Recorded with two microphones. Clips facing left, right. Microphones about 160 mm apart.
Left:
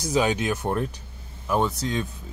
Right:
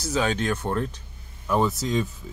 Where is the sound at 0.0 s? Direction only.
15° left (ahead or behind).